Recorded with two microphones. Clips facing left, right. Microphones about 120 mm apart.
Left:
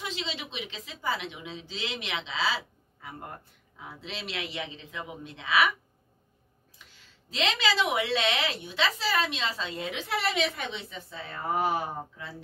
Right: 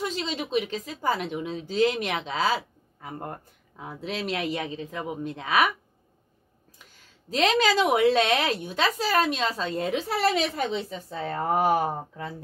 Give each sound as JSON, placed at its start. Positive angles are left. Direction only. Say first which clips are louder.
{"t": 0.0, "sound": "a woman's voice", "louder": "right 6 dB", "side_deg": -45}
{"t": 6.9, "sound": "a woman's voice", "louder": "right 12 dB", "side_deg": -45}